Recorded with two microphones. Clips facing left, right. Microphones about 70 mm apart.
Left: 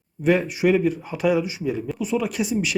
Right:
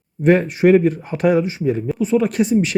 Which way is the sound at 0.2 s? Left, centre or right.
Right.